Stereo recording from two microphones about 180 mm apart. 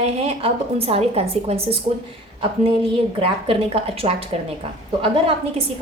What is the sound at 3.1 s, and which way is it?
A woman's voice, 30° right (ahead or behind).